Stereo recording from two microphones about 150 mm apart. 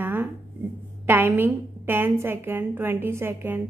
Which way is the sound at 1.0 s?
15° right (ahead or behind).